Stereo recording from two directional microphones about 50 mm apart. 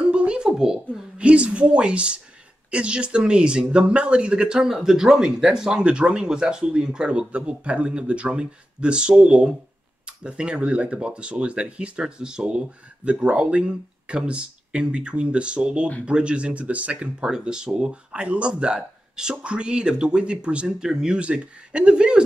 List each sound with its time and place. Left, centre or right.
0.0 s a sound: right
1.1 s speech: right
17.3 s speech: centre